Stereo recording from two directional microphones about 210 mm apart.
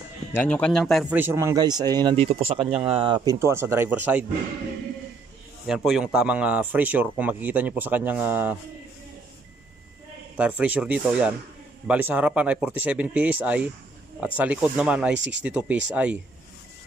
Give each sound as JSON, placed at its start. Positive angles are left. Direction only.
{"t": 0.3, "sound": "speech", "side_deg": 5}
{"t": 1.2, "sound": "speech", "side_deg": -15}
{"t": 2.6, "sound": "speech", "side_deg": -5}
{"t": 2.9, "sound": "a man's voice", "side_deg": -25}
{"t": 5.9, "sound": "a man's voice", "side_deg": -5}
{"t": 10.3, "sound": "a man's voice", "side_deg": -5}